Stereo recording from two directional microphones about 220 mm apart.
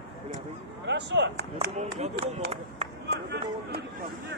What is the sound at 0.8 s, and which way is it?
Speech, 50° right (ahead or behind).